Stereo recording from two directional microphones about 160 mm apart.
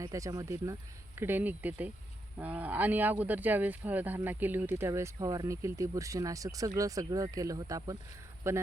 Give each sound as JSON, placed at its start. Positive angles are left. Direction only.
{"t": 0.0, "sound": "speech", "side_deg": -20}